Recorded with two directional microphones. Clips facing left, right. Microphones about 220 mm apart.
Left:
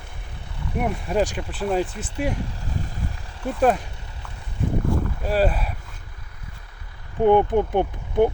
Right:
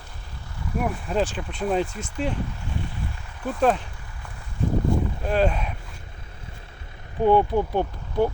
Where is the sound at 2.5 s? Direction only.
40° left (ahead or behind).